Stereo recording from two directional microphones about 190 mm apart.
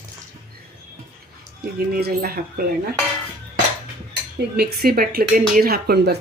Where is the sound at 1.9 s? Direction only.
50° right (ahead or behind).